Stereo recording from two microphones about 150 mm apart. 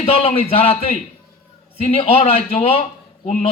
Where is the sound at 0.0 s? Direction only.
40° left (ahead or behind).